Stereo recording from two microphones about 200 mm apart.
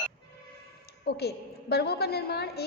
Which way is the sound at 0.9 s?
55° left (ahead or behind).